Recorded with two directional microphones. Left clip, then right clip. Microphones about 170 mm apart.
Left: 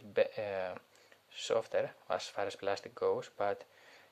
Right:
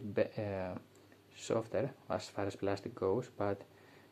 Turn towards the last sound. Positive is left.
turn(degrees=30)  # may be behind; listen again after turning